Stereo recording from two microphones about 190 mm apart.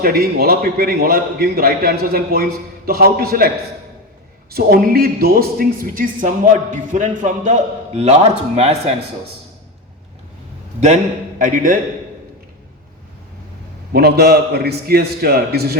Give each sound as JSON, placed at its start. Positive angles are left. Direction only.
{"t": 0.0, "sound": "speech", "side_deg": -50}
{"t": 4.5, "sound": "speech", "side_deg": -50}
{"t": 10.8, "sound": "a man's voice", "side_deg": -40}
{"t": 13.9, "sound": "a man's voice", "side_deg": -55}